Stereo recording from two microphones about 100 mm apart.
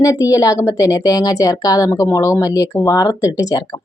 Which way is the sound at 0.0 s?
35° left (ahead or behind).